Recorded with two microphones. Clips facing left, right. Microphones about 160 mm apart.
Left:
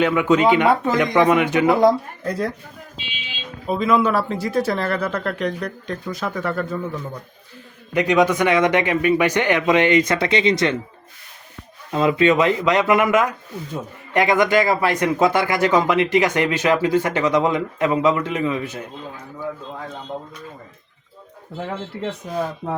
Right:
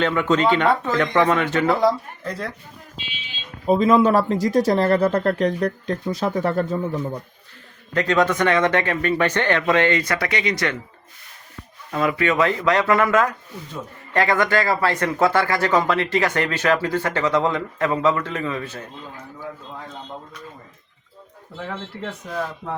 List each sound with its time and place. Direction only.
0.0 s speech: 10° left (ahead or behind)
3.7 s speech: 35° right (ahead or behind)
7.9 s speech: 15° left (ahead or behind)
11.9 s speech: 20° left (ahead or behind)